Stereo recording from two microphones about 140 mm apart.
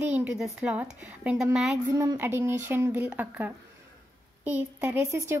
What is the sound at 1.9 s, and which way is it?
A woman's voice, 20° right (ahead or behind).